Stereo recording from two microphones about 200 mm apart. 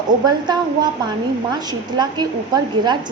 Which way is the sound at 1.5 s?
20° right (ahead or behind).